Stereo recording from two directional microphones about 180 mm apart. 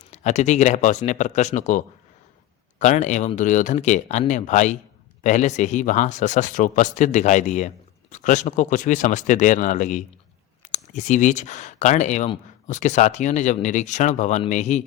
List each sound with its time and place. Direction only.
0.1 s speech: 40° left (ahead or behind)